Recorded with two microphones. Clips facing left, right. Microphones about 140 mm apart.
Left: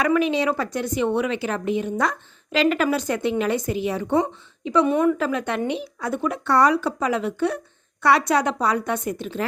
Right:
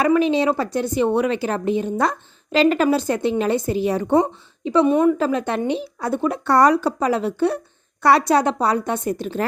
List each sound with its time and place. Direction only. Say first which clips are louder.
0.0 s a woman's voice: right 3 dB; 30° right (ahead or behind)